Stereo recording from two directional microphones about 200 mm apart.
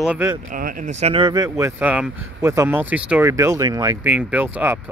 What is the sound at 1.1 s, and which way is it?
Speech, 20° right (ahead or behind).